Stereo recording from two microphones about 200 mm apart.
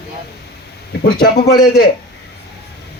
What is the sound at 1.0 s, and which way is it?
Speech, 50° left (ahead or behind).